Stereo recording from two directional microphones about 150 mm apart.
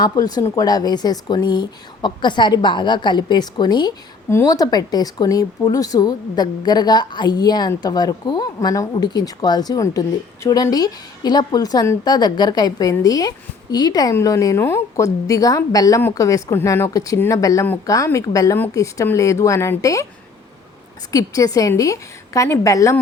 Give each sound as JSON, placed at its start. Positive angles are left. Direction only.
{"t": 0.0, "sound": "a woman's voice", "side_deg": 25}
{"t": 21.1, "sound": "a woman's voice", "side_deg": 25}